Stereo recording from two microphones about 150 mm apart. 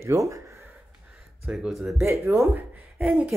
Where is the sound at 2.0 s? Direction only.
20° right (ahead or behind).